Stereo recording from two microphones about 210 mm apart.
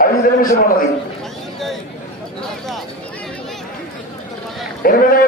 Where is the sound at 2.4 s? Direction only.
Centre (ahead or behind).